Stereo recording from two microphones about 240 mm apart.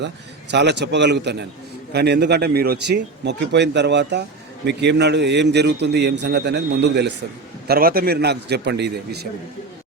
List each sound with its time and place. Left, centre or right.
0.5 s a man's voice: right